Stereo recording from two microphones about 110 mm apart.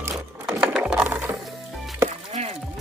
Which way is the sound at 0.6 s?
10° right (ahead or behind).